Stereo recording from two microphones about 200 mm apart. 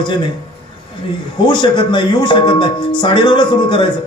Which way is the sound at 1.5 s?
25° left (ahead or behind).